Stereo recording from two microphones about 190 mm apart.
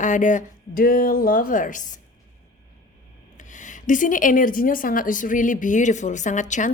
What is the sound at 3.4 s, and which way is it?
A woman's voice, 40° left (ahead or behind).